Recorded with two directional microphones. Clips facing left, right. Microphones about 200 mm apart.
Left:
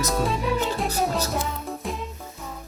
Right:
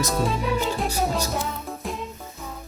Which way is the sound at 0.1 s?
Centre (ahead or behind).